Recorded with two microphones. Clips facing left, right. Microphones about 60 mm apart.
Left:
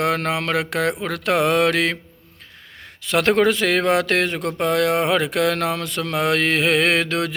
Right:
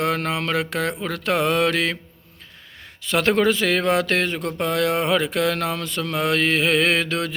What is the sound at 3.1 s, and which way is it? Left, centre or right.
Speech, left.